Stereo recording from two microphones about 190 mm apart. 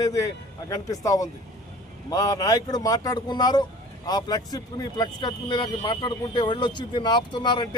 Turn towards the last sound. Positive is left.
turn(degrees=25)  # may be behind; listen again after turning